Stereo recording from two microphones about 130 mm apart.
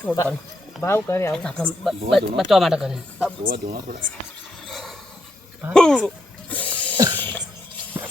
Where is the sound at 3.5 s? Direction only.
90° right.